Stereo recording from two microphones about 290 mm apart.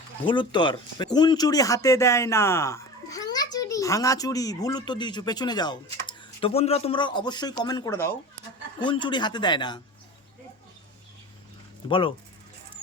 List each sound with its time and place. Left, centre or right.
0.3 s speech: centre
11.9 s speech: centre